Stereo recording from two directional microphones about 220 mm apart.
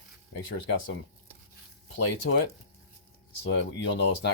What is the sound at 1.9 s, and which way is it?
Speech, 50° left (ahead or behind).